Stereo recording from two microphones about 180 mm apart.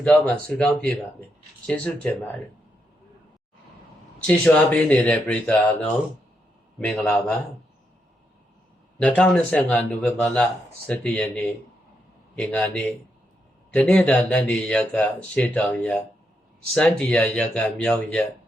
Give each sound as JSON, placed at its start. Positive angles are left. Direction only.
{"t": 0.0, "sound": "speech", "side_deg": 5}
{"t": 4.3, "sound": "speech", "side_deg": 5}
{"t": 9.0, "sound": "speech", "side_deg": 5}
{"t": 12.4, "sound": "speech", "side_deg": 5}